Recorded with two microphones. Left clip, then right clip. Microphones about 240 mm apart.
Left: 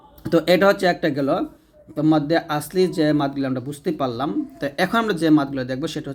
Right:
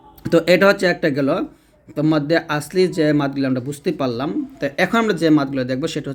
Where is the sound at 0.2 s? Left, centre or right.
Centre.